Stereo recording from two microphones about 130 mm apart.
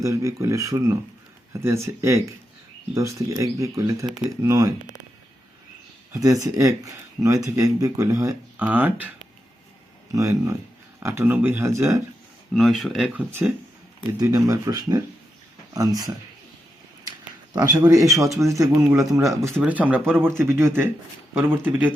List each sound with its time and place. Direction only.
0.0 s speech: 25° right (ahead or behind)
6.1 s speech: 25° right (ahead or behind)
8.5 s speech: 10° right (ahead or behind)
10.1 s speech: 25° right (ahead or behind)
12.5 s speech: centre (ahead or behind)
14.1 s speech: 25° right (ahead or behind)
17.1 s speech: 30° right (ahead or behind)
19.6 s speech: 10° right (ahead or behind)